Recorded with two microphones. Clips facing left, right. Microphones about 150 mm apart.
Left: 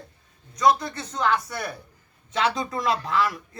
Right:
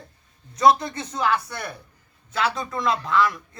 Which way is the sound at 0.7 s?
20° right (ahead or behind).